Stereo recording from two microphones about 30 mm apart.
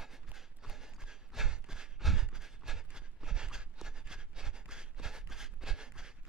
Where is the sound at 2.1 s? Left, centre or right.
Centre.